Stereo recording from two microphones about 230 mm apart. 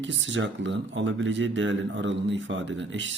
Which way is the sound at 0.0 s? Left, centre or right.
Right.